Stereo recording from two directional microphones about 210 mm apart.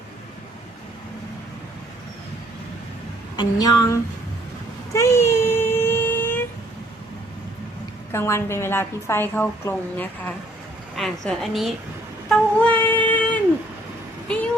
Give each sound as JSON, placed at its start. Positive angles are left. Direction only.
{"t": 3.3, "sound": "a woman's voice", "side_deg": 20}
{"t": 4.9, "sound": "a sound", "side_deg": 15}
{"t": 8.1, "sound": "a woman's voice", "side_deg": 10}
{"t": 12.3, "sound": "child singing", "side_deg": 5}